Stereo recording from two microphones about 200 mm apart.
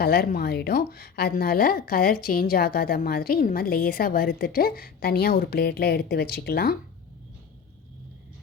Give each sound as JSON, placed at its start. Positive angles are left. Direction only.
{"t": 0.0, "sound": "a woman's voice", "side_deg": 50}